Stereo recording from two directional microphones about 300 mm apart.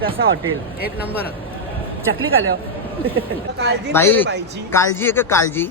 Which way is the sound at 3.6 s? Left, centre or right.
Right.